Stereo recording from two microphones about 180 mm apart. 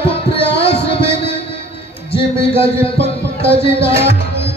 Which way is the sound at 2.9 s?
30° left (ahead or behind).